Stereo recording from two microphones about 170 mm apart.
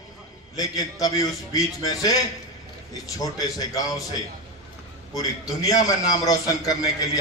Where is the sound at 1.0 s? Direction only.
20° left (ahead or behind).